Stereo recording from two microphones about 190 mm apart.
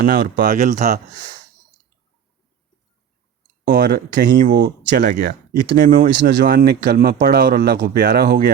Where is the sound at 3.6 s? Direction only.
55° right (ahead or behind).